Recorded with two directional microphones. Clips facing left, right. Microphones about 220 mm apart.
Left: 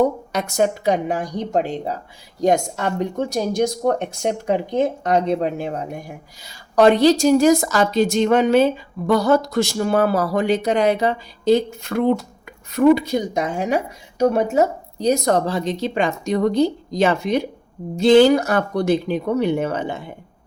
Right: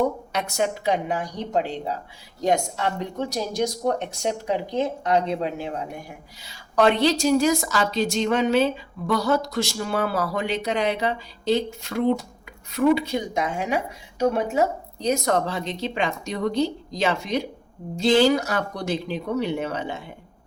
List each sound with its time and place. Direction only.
0.3 s a woman's voice: 40° left (ahead or behind)